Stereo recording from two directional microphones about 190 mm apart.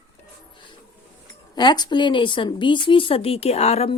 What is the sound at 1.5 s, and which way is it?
A woman's voice, 20° left (ahead or behind).